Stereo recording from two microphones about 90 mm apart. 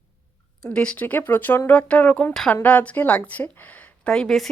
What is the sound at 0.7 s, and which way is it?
Speech, 10° left (ahead or behind).